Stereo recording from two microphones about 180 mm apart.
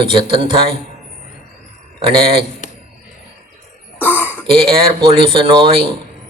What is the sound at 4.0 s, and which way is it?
Throat clearing, 10° left (ahead or behind).